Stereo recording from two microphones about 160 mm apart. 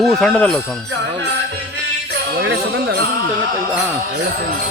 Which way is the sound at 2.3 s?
90° right.